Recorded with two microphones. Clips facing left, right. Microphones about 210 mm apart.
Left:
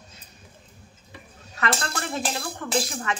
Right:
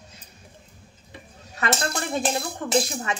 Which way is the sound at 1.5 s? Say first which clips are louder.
Right 2 dB; 20° right (ahead or behind).